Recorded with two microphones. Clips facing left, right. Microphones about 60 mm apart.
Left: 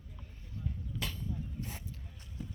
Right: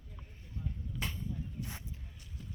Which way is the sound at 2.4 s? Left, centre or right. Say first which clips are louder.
Left 5 dB; centre.